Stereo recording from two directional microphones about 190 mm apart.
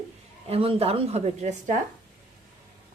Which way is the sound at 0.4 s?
30° right (ahead or behind).